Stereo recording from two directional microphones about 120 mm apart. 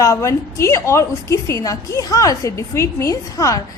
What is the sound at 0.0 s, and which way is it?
A woman's voice, 25° left (ahead or behind).